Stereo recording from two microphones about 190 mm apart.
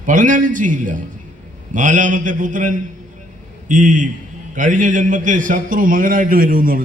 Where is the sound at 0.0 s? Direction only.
40° right (ahead or behind).